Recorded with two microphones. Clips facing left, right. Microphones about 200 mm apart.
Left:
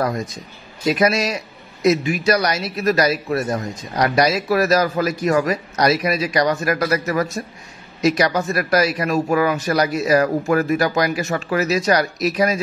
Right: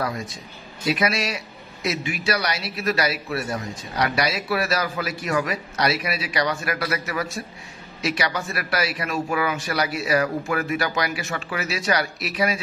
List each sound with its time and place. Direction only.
0.0 s a man's voice: 40° left (ahead or behind)